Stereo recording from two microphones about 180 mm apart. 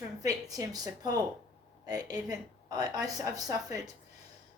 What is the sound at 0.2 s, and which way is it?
A woman's voice, 20° right (ahead or behind).